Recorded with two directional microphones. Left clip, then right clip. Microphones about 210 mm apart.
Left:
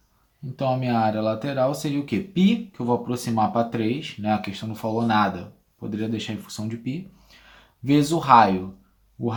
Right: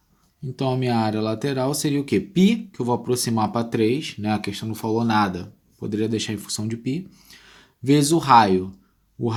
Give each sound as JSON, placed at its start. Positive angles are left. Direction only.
{"t": 0.5, "sound": "speech", "side_deg": -45}